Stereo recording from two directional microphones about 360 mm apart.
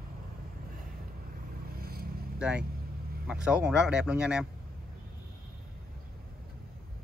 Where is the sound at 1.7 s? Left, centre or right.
Right.